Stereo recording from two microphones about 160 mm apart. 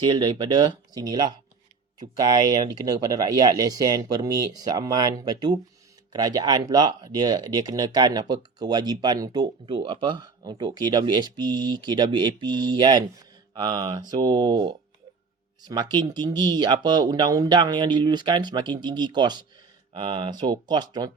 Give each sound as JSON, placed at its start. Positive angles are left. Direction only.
{"t": 0.0, "sound": "speech", "side_deg": -30}